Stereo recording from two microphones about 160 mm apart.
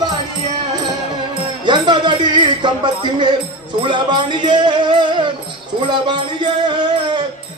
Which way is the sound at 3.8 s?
30° right (ahead or behind).